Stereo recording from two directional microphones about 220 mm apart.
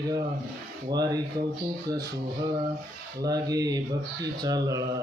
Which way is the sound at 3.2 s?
15° right (ahead or behind).